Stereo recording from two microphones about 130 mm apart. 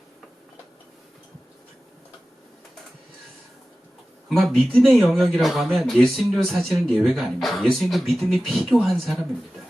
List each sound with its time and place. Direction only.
4.4 s speech: centre (ahead or behind)